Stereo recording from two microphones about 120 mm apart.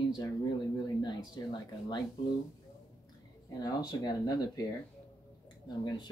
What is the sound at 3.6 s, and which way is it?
Speech, 35° left (ahead or behind).